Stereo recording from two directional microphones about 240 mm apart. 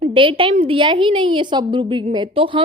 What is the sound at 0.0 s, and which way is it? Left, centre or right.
Speech, right.